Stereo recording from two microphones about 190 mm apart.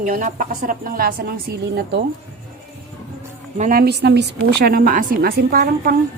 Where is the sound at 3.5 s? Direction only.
45° right (ahead or behind).